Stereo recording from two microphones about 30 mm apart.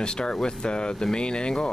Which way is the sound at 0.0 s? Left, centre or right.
Left.